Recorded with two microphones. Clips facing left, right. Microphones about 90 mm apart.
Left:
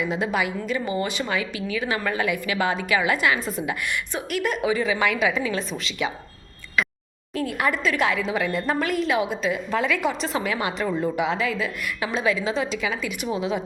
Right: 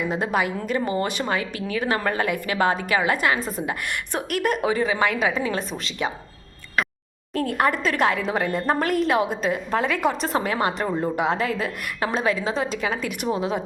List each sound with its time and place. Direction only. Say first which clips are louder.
0.0 s a woman's voice: right 1 dB; 45° right (ahead or behind)
4.1 s a woman's voice: right 4 dB; 50° right (ahead or behind)
7.3 s a woman's voice: right 2 dB; 50° right (ahead or behind)